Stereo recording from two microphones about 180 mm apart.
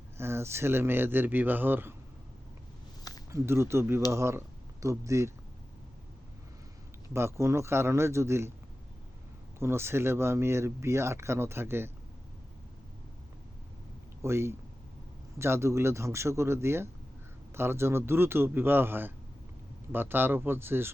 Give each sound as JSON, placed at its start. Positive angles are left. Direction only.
{"t": 0.2, "sound": "speech", "side_deg": -15}
{"t": 3.3, "sound": "speech", "side_deg": -15}
{"t": 7.1, "sound": "speech", "side_deg": -15}
{"t": 9.6, "sound": "speech", "side_deg": -15}
{"t": 14.2, "sound": "speech", "side_deg": -15}